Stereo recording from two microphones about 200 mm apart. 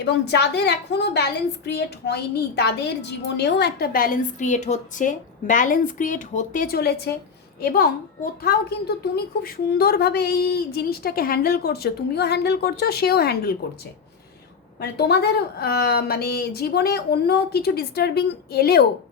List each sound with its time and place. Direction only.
0.0 s a woman's voice: 60° left (ahead or behind)
14.8 s a woman's voice: 55° left (ahead or behind)